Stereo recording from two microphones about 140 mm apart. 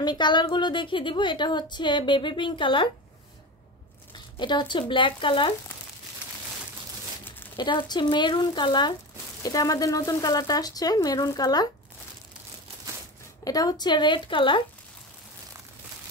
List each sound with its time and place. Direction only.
0.0 s a woman's voice: 30° left (ahead or behind)
4.4 s a woman's voice: 35° left (ahead or behind)
7.5 s a woman's voice: 35° left (ahead or behind)
13.4 s a woman's voice: 25° left (ahead or behind)